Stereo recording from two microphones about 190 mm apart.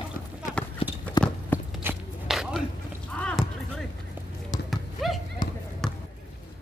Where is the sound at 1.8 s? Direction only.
5° right (ahead or behind).